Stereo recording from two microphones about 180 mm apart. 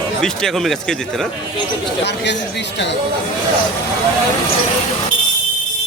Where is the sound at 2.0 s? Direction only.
70° left (ahead or behind).